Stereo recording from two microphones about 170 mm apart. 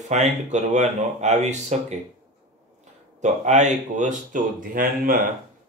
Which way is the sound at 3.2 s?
45° right (ahead or behind).